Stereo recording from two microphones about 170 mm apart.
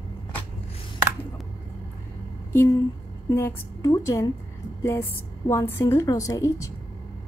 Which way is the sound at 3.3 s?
15° left (ahead or behind).